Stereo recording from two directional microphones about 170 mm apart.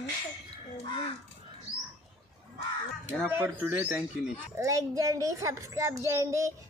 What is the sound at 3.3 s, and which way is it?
A child's voice, 10° right (ahead or behind).